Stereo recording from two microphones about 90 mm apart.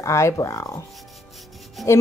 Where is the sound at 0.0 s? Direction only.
35° left (ahead or behind).